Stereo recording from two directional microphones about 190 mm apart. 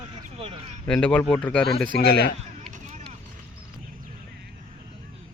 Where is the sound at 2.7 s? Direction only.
35° right (ahead or behind).